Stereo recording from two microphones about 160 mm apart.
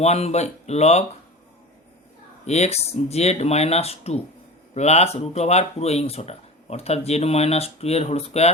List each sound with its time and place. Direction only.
0.0 s speech: 40° left (ahead or behind)
2.5 s speech: 40° left (ahead or behind)